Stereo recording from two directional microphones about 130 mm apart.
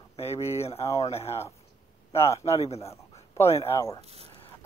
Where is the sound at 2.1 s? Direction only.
20° left (ahead or behind).